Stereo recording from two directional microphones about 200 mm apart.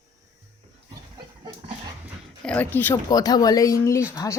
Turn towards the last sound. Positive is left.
turn(degrees=15)  # may be behind; listen again after turning